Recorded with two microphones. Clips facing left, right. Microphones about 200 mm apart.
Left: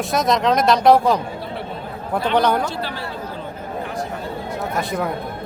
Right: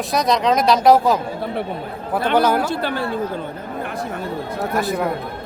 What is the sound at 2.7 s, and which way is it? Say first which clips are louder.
Speech: right 5 dB; 55° right (ahead or behind).